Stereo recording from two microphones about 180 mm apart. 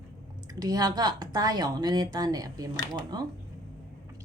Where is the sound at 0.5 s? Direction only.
20° right (ahead or behind).